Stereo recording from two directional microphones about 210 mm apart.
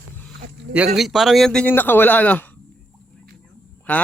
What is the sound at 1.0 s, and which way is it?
Speech, centre (ahead or behind).